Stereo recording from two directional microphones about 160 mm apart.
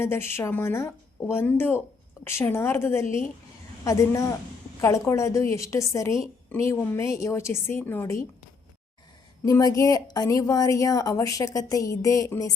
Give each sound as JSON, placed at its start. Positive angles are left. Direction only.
{"t": 0.0, "sound": "a woman's voice", "side_deg": 15}
{"t": 9.4, "sound": "a woman's voice", "side_deg": 20}